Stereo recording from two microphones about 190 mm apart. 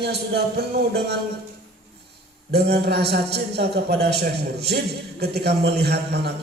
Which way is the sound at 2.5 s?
60° right (ahead or behind).